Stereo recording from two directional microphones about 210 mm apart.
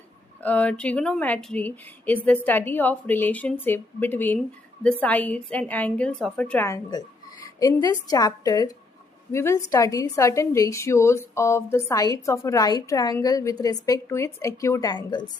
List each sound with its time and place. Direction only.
0.4 s a woman's voice: 5° left (ahead or behind)